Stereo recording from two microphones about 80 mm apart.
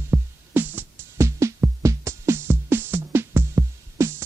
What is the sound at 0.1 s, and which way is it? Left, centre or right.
Music, right.